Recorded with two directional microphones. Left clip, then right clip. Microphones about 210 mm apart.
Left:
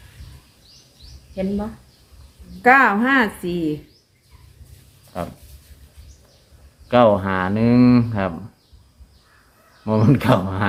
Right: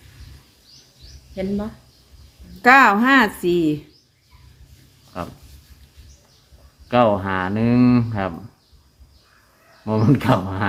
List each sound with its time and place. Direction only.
2.6 s a woman's voice: 45° right (ahead or behind)
5.1 s a sound: 5° left (ahead or behind)
6.8 s speech: 10° left (ahead or behind)
9.8 s speech: 5° left (ahead or behind)